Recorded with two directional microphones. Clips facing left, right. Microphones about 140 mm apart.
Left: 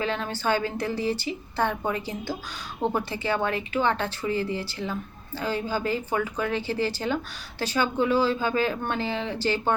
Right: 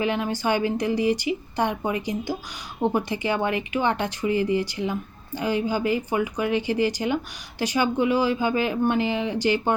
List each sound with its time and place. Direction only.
0.0 s speech: 15° right (ahead or behind)